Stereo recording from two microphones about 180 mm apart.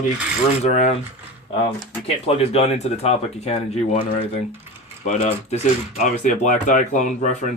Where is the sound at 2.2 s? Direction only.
35° left (ahead or behind).